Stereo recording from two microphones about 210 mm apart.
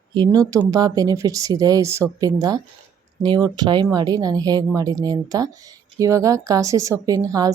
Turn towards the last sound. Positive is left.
turn(degrees=-15)  # may be behind; listen again after turning